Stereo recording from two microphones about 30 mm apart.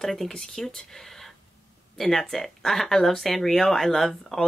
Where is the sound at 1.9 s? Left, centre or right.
Centre.